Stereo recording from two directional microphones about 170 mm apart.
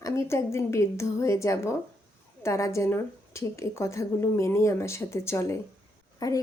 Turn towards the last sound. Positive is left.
turn(degrees=20)  # may be behind; listen again after turning